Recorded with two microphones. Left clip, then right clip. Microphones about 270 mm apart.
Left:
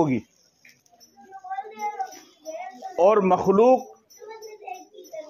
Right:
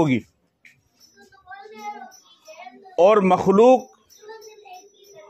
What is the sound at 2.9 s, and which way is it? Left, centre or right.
Speech, right.